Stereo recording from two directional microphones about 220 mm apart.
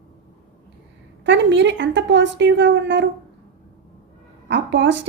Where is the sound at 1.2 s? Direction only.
55° right (ahead or behind).